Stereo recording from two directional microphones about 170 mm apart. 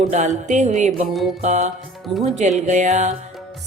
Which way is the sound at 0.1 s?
45° right (ahead or behind).